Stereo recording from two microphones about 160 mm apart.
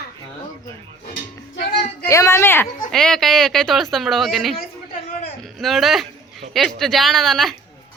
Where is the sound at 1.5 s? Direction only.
90° left.